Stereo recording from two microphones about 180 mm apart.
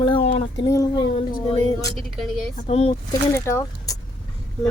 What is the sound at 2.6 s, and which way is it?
Speech, 35° left (ahead or behind).